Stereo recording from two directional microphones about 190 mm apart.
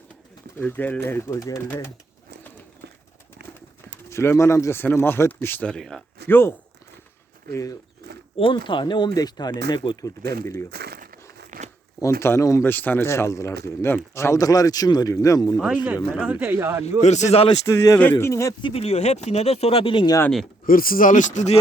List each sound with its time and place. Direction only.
0.6 s speech: 10° left (ahead or behind)
4.1 s speech: 15° left (ahead or behind)
7.5 s speech: 15° left (ahead or behind)
10.7 s crumpling: 55° right (ahead or behind)
12.2 s speech: 15° left (ahead or behind)
15.5 s speech: 5° right (ahead or behind)
17.0 s speech: 35° left (ahead or behind)
17.5 s speech: 15° left (ahead or behind)
18.7 s speech: 30° left (ahead or behind)
20.7 s a man's voice: 50° left (ahead or behind)